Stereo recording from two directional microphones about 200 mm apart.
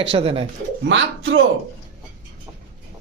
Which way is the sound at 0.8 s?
70° right (ahead or behind).